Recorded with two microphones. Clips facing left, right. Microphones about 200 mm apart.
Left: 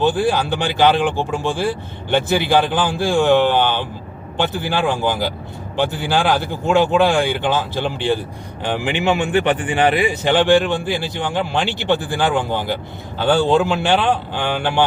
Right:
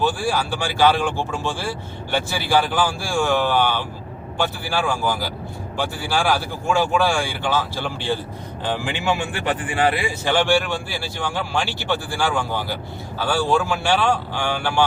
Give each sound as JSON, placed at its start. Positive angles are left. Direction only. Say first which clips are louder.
{"t": 0.0, "sound": "speech", "louder": "left 5 dB", "side_deg": 20}